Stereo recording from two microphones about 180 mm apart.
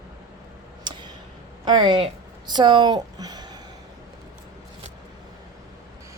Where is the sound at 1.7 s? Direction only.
25° right (ahead or behind).